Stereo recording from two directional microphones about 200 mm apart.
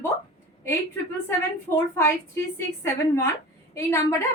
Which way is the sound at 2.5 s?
15° left (ahead or behind).